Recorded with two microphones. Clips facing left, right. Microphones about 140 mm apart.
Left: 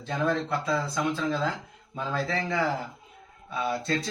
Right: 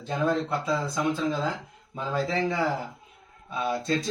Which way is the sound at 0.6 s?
15° right (ahead or behind).